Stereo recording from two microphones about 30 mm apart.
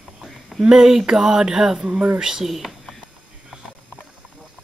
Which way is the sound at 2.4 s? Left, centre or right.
Centre.